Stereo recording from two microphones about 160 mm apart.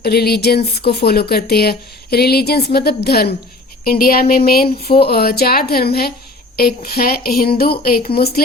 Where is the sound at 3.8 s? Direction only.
65° left (ahead or behind).